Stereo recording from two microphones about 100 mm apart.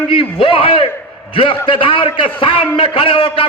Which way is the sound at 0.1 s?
65° left (ahead or behind).